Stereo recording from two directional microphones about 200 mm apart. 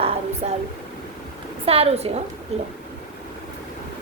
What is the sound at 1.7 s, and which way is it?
A woman's voice, 30° right (ahead or behind).